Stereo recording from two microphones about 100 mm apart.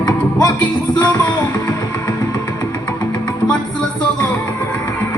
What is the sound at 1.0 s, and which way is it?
Music, 15° left (ahead or behind).